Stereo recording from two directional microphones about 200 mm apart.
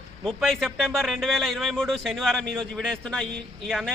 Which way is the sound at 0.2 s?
Centre (ahead or behind).